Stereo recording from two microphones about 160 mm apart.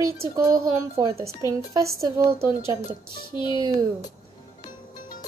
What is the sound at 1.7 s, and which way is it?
Music, 20° right (ahead or behind).